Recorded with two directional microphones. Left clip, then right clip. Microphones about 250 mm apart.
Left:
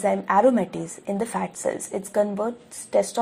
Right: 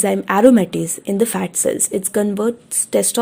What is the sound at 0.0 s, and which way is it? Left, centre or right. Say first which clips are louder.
Speech: right 5 dB; right.